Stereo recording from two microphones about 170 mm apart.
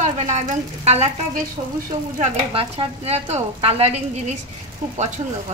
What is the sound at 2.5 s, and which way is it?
Speech, 30° right (ahead or behind).